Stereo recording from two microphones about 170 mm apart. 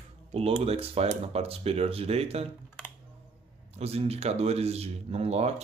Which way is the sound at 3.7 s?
40° right (ahead or behind).